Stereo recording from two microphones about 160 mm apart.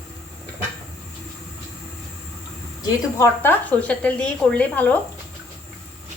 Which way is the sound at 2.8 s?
15° left (ahead or behind).